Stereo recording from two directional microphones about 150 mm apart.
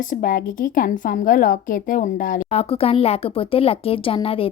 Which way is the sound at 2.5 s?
40° left (ahead or behind).